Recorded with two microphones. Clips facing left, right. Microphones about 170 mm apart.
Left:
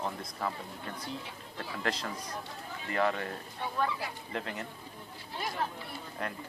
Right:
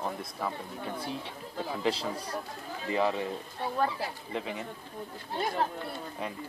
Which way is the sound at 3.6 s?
35° right (ahead or behind).